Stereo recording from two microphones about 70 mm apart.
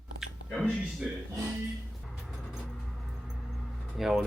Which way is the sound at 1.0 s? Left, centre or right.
Centre.